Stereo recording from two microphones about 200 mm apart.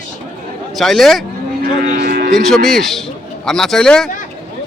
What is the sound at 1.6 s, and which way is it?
Moo, 45° right (ahead or behind).